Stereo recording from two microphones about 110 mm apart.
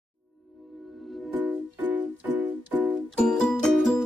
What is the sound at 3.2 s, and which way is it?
Music, 5° left (ahead or behind).